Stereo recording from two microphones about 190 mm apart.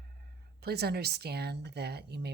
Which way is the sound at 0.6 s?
55° right (ahead or behind).